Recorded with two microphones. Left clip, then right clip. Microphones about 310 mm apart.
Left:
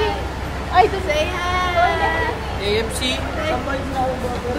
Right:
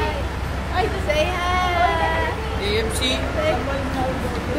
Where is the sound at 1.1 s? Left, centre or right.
Centre.